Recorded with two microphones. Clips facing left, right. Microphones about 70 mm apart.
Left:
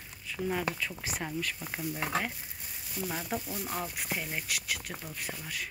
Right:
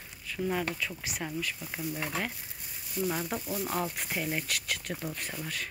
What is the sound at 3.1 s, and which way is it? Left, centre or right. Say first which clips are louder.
Speech: right 2 dB; centre.